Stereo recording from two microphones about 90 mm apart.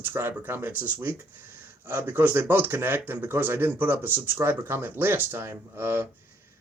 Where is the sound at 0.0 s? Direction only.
25° right (ahead or behind).